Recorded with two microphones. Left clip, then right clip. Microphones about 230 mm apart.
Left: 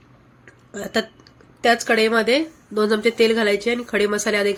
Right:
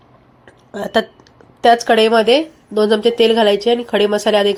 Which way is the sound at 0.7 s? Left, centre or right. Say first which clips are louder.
Right 7 dB; centre.